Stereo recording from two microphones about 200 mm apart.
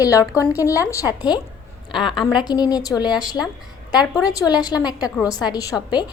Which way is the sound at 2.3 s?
20° left (ahead or behind).